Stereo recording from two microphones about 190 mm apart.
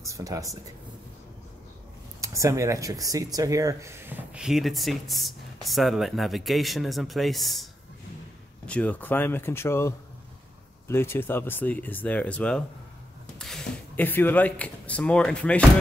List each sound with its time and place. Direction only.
0.0 s speech: 15° right (ahead or behind)
2.2 s speech: 15° right (ahead or behind); by 7.6 s centre (ahead or behind)
8.6 s speech: 5° left (ahead or behind)